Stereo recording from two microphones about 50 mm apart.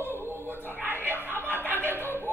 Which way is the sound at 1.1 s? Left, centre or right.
Left.